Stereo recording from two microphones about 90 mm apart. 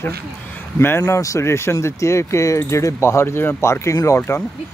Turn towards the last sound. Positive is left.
turn(degrees=35)  # may be behind; listen again after turning